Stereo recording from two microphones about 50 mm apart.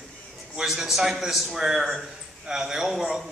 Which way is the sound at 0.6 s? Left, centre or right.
Centre.